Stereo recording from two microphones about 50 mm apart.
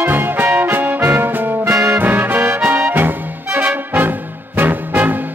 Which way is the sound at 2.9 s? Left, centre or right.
Right.